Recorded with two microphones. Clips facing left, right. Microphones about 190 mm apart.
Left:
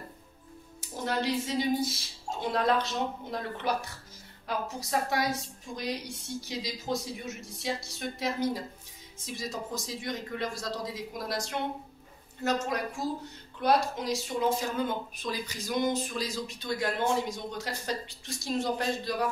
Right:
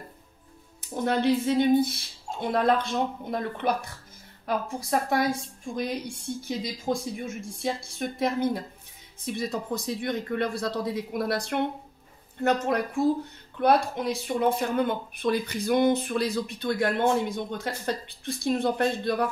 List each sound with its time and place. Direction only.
0.7 s a woman's voice: 55° right (ahead or behind)